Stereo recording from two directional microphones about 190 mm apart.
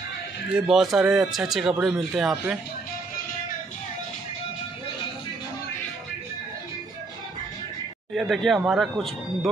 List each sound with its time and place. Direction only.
0.6 s speech: centre (ahead or behind)
8.1 s speech: centre (ahead or behind)